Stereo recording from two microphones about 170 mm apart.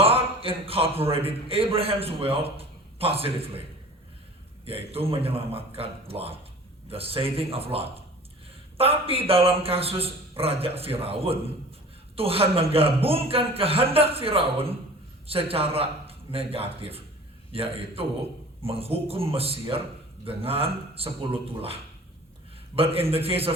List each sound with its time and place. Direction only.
0.0 s a man's voice: 35° right (ahead or behind)
4.6 s a man's voice: 35° right (ahead or behind)